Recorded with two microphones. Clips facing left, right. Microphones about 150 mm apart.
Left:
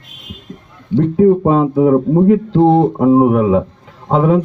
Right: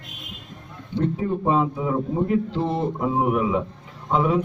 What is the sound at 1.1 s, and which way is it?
Speech, 60° left (ahead or behind).